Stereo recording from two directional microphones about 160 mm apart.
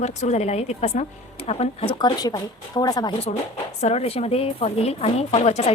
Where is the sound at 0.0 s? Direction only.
45° left (ahead or behind); by 3.2 s 25° left (ahead or behind).